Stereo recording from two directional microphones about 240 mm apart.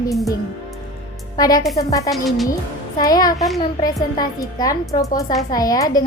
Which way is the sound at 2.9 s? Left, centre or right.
Centre.